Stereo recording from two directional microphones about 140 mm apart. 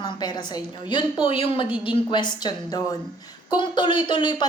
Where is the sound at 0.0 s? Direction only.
30° left (ahead or behind).